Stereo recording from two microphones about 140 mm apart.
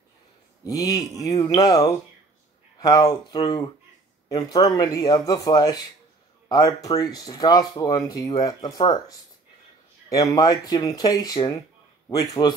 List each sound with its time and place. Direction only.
0.7 s speech: 25° left (ahead or behind)
10.0 s speech: 25° left (ahead or behind)